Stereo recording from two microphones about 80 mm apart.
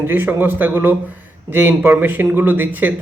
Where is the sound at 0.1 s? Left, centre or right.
Right.